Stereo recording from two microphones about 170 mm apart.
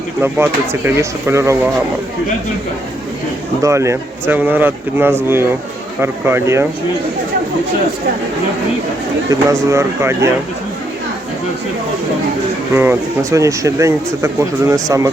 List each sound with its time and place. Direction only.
0.2 s speech: 15° right (ahead or behind)
3.6 s speech: 15° right (ahead or behind)
9.3 s speech: 15° right (ahead or behind)
12.7 s speech: 15° right (ahead or behind)